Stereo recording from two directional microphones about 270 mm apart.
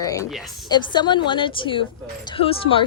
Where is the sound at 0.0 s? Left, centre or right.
Centre.